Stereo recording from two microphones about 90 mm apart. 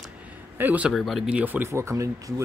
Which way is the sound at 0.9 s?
Centre (ahead or behind).